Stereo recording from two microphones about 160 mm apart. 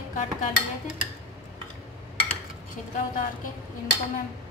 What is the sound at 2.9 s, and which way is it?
Speech, 55° left (ahead or behind).